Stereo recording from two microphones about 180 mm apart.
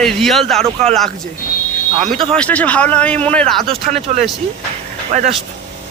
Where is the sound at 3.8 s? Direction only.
45° right (ahead or behind).